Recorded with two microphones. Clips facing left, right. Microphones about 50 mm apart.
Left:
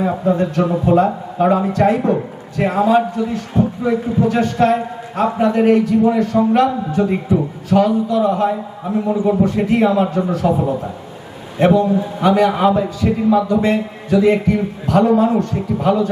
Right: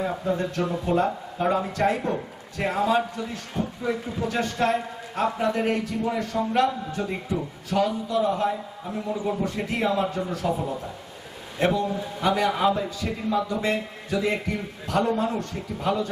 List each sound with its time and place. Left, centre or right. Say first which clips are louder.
0.0 s a man's voice: left 9 dB; left
7.0 s a man's voice: left 12 dB; left
7.9 s a man's voice: left 8 dB; left